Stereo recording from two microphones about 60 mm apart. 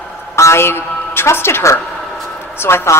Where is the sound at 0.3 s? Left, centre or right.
Left.